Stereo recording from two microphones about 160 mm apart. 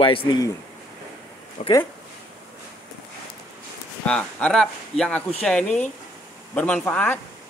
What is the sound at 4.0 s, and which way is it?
Speech, 5° left (ahead or behind).